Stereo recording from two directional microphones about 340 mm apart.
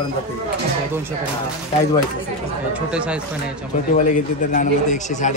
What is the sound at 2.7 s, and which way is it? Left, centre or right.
Speech, centre.